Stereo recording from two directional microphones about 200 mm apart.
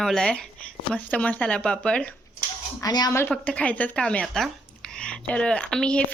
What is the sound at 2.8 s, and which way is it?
Speech, 20° left (ahead or behind).